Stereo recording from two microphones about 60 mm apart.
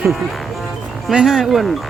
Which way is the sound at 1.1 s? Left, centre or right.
Centre.